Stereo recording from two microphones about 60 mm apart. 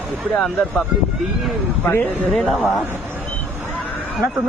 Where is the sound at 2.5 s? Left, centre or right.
Centre.